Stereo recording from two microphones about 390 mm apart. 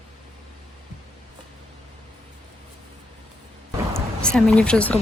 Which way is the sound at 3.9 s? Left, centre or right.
Centre.